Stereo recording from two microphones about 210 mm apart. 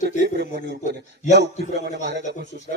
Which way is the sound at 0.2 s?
50° right (ahead or behind).